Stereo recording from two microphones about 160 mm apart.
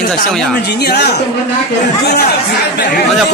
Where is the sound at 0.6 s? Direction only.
90° left.